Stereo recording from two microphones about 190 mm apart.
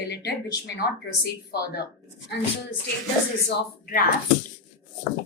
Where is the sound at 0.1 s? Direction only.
60° left (ahead or behind).